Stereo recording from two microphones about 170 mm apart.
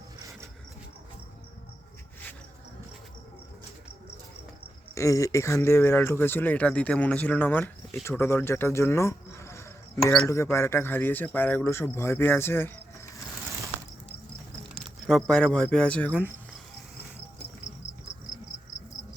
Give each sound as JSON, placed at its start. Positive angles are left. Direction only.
{"t": 4.9, "sound": "speech", "side_deg": 20}
{"t": 14.8, "sound": "speech", "side_deg": 0}